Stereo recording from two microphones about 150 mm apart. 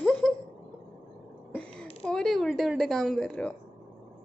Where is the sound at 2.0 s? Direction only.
5° left (ahead or behind).